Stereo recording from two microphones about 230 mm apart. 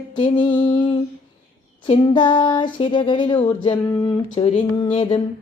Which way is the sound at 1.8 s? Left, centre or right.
Left.